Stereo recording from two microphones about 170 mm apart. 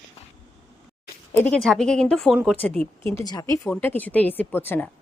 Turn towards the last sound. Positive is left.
turn(degrees=10)  # may be behind; listen again after turning